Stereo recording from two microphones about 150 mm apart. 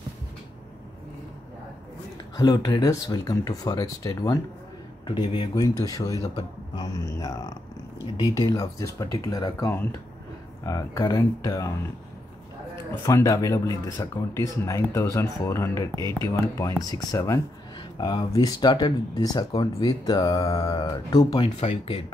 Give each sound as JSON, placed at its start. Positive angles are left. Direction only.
{"t": 2.3, "sound": "speech", "side_deg": 25}
{"t": 13.0, "sound": "speech", "side_deg": 20}